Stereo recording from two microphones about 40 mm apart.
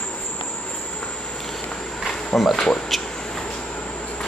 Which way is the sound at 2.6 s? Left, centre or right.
Centre.